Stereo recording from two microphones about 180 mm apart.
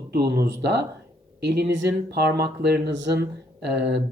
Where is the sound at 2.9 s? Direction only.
90° right.